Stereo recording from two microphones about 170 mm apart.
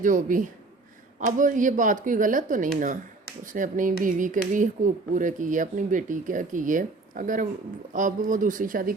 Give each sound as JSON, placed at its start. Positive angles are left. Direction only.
{"t": 0.0, "sound": "speech", "side_deg": -50}